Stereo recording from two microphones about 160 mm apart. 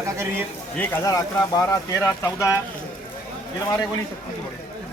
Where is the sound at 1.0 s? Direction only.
20° left (ahead or behind).